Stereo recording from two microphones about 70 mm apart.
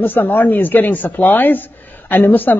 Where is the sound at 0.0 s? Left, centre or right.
Left.